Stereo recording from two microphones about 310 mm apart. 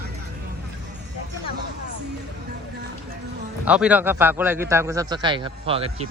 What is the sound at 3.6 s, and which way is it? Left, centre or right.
A man's voice, centre.